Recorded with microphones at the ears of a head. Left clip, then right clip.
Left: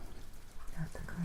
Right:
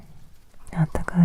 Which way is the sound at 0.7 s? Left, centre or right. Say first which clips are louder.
Right 19 dB; right.